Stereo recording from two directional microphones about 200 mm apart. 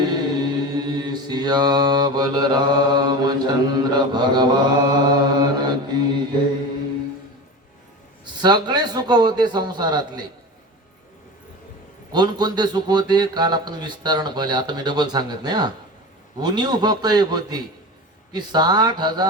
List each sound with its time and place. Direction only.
0.0 s mantra: 20° right (ahead or behind)
8.2 s a man's voice: 20° right (ahead or behind)
12.1 s a man's voice: 20° right (ahead or behind)